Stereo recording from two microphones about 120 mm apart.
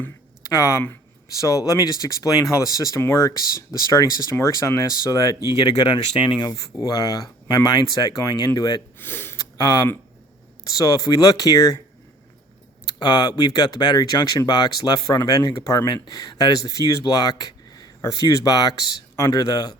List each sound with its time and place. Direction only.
0.5 s speech: 30° left (ahead or behind)
9.0 s speech: 15° left (ahead or behind)
9.4 s speech: 30° left (ahead or behind)
12.9 s speech: 35° left (ahead or behind)